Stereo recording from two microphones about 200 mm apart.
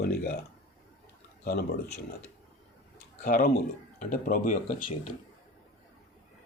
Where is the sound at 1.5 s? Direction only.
55° left (ahead or behind).